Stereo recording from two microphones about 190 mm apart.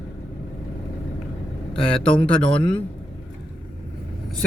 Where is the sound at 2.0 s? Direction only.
5° left (ahead or behind).